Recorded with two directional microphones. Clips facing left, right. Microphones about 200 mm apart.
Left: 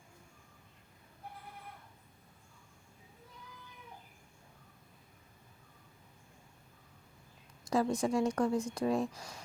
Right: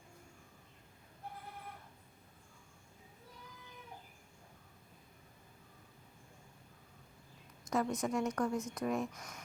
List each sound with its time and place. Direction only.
7.7 s speech: 30° left (ahead or behind)